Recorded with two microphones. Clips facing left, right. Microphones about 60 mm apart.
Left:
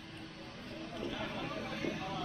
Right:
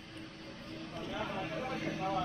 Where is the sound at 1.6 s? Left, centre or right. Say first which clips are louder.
Right 1 dB; right.